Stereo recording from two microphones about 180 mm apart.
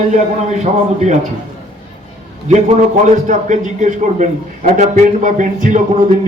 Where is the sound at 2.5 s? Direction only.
40° right (ahead or behind).